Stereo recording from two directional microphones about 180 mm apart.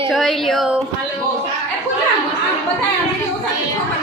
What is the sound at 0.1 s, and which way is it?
Speech, centre (ahead or behind).